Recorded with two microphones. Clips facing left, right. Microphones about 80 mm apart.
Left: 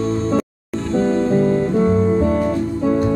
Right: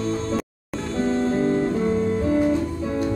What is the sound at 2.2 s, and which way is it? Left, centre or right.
Music, left.